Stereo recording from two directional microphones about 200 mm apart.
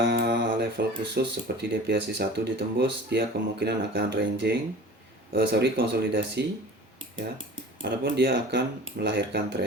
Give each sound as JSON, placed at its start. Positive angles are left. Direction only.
{"t": 0.0, "sound": "speech", "side_deg": -55}
{"t": 7.9, "sound": "speech", "side_deg": -55}